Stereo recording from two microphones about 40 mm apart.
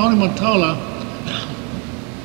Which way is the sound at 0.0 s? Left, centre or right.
Centre.